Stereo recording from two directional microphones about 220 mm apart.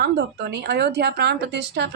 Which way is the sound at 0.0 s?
50° right (ahead or behind).